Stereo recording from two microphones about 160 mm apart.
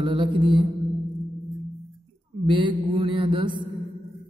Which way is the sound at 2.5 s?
30° right (ahead or behind).